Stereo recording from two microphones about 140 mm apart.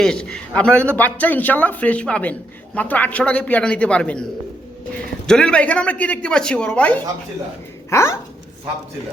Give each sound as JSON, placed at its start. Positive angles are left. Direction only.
{"t": 0.0, "sound": "speech", "side_deg": 5}
{"t": 7.9, "sound": "speech", "side_deg": 20}